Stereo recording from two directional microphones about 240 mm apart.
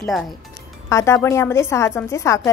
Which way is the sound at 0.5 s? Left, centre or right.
Centre.